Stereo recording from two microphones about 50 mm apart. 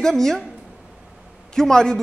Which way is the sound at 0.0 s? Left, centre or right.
Centre.